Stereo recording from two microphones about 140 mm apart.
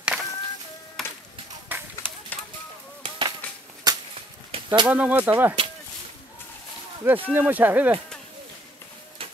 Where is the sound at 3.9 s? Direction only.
30° right (ahead or behind).